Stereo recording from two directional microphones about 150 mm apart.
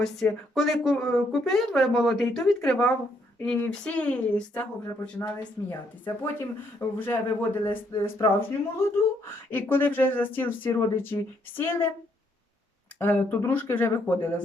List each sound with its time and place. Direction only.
0.0 s speech: 5° left (ahead or behind)
6.7 s speech: 15° left (ahead or behind)
13.0 s speech: 15° left (ahead or behind)